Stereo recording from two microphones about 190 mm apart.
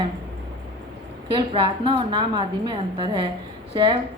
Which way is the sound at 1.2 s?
30° right (ahead or behind).